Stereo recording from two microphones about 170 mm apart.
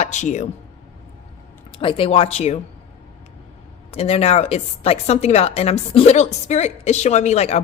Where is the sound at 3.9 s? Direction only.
35° left (ahead or behind).